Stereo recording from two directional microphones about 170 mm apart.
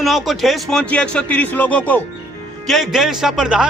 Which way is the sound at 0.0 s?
Centre (ahead or behind).